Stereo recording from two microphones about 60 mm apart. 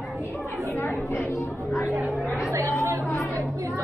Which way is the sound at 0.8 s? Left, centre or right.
Left.